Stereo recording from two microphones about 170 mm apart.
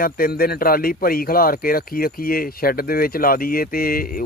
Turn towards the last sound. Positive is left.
turn(degrees=55)  # may be behind; listen again after turning